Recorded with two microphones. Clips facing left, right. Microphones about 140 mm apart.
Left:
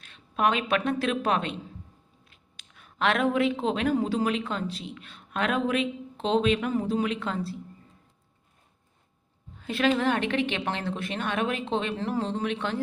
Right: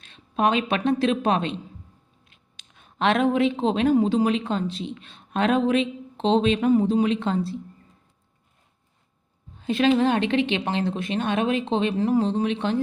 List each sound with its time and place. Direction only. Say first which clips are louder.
0.0 s a woman's voice: right 3 dB; 25° right (ahead or behind)
9.6 s a woman's voice: right 5 dB; 20° right (ahead or behind)